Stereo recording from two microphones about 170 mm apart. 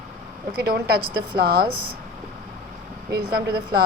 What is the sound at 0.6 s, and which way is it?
A woman's voice, 70° right (ahead or behind).